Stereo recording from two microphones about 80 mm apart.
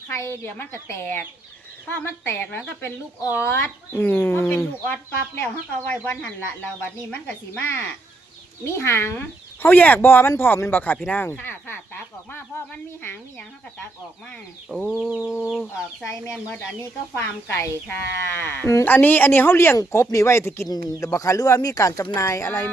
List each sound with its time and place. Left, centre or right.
0.1 s speech: left; by 7.6 s centre
7.6 s speech: left
14.8 s chicken: centre
17.2 s speech: left
18.9 s speech: left
20.7 s speech: left